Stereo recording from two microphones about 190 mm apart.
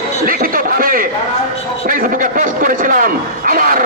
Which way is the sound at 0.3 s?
50° right (ahead or behind).